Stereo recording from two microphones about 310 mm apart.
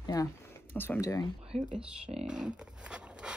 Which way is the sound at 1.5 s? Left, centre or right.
Centre.